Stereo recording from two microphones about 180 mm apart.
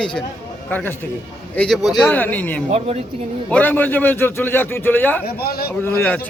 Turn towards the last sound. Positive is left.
turn(degrees=10)  # may be behind; listen again after turning